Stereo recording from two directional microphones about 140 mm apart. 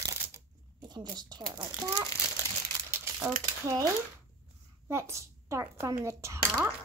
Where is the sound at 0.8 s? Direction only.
30° right (ahead or behind).